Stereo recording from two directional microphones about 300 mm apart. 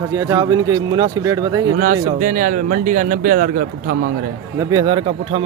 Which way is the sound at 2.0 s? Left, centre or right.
Right.